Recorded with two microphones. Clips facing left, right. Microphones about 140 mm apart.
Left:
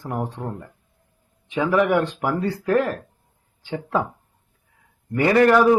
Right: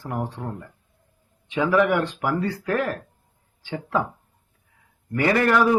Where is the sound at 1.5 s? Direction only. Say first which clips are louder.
Left 1 dB; 15° left (ahead or behind).